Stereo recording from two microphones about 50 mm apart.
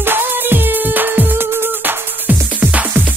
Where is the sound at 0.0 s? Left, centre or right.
Right.